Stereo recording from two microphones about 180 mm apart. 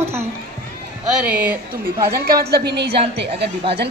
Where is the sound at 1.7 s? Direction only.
60° right (ahead or behind).